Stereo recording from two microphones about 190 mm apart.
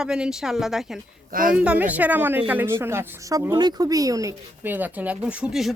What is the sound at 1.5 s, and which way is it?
Speech, 5° right (ahead or behind).